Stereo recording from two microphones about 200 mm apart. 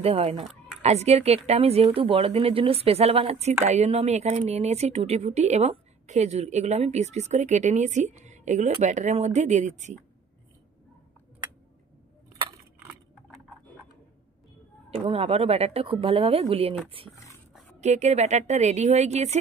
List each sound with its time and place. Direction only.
0.0 s speech: 30° right (ahead or behind)
15.0 s speech: 30° right (ahead or behind)